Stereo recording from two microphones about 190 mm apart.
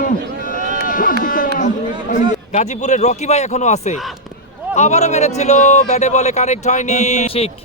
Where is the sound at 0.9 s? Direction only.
45° left (ahead or behind).